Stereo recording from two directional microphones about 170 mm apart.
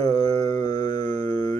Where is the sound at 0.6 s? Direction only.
45° right (ahead or behind).